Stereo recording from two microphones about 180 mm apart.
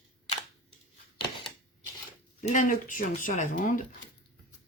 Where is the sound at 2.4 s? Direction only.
45° left (ahead or behind).